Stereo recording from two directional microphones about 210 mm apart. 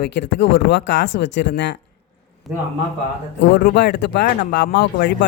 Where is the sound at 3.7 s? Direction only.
55° left (ahead or behind).